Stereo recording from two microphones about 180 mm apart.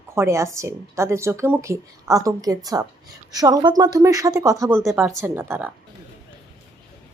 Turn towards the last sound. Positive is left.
turn(degrees=-15)  # may be behind; listen again after turning